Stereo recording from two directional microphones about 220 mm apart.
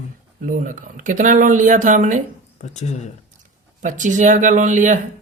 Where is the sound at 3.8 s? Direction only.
35° right (ahead or behind).